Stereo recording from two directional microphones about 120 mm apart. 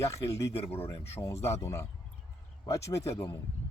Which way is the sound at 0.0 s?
25° left (ahead or behind).